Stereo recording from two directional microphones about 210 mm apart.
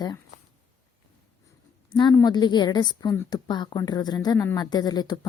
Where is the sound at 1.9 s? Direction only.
20° left (ahead or behind).